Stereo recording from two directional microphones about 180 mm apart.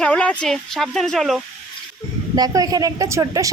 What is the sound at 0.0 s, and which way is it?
Speech, 5° left (ahead or behind).